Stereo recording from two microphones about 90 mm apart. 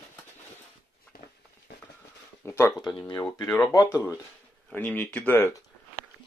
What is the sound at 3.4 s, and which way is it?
Speech, 45° left (ahead or behind).